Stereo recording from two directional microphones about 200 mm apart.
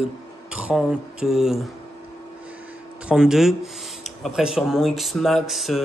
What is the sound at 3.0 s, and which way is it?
Speech, 5° right (ahead or behind).